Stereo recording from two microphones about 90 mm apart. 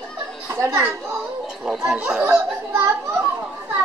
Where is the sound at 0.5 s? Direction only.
30° right (ahead or behind).